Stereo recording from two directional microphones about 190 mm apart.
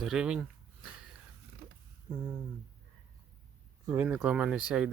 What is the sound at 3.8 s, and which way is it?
Speech, 10° right (ahead or behind).